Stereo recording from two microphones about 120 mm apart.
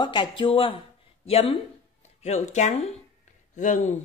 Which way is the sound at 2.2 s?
70° left (ahead or behind).